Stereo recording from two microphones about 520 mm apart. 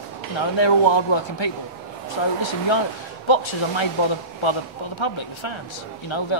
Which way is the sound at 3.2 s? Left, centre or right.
Left.